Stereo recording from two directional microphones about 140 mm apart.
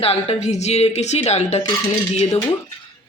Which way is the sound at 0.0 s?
45° left (ahead or behind).